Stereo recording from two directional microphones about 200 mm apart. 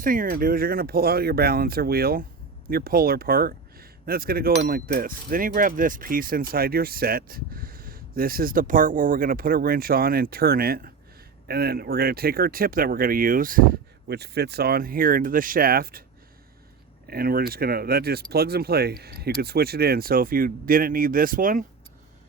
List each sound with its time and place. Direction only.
0.0 s speech: 45° right (ahead or behind)
17.1 s speech: 50° right (ahead or behind)